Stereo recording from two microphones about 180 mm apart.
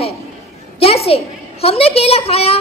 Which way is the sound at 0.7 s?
35° left (ahead or behind).